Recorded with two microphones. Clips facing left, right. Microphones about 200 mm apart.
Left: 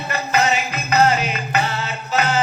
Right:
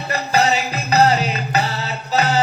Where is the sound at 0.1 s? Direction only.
35° right (ahead or behind).